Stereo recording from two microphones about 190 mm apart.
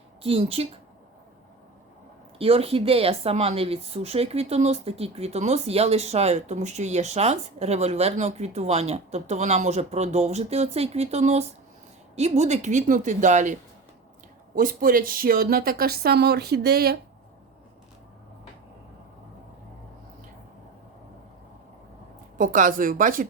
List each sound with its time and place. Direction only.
0.2 s speech: 30° right (ahead or behind)
2.4 s speech: 30° right (ahead or behind); by 17.0 s 55° right (ahead or behind)
22.4 s speech: 45° right (ahead or behind)